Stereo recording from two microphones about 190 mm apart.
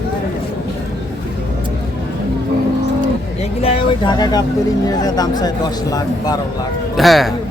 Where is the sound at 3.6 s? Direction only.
30° left (ahead or behind).